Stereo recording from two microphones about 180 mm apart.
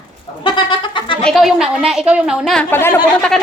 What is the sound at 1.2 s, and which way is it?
Speech, centre (ahead or behind).